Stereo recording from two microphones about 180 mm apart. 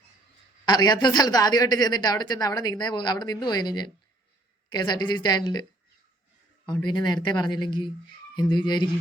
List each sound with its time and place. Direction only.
0.6 s a woman's voice: 20° left (ahead or behind)
6.8 s a woman's voice: 25° left (ahead or behind)